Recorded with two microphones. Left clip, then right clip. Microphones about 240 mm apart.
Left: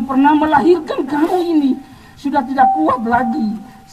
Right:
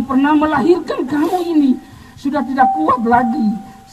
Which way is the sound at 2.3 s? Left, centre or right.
Right.